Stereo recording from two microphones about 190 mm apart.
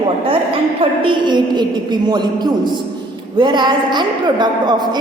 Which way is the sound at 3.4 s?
25° right (ahead or behind).